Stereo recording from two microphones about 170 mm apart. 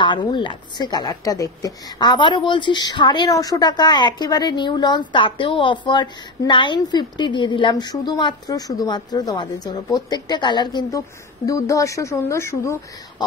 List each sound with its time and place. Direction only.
0.0 s a woman's voice: 25° left (ahead or behind)